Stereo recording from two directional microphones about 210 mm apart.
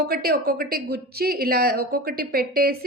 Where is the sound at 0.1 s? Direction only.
45° right (ahead or behind).